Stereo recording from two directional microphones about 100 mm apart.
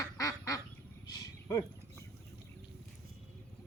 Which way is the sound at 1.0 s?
40° left (ahead or behind).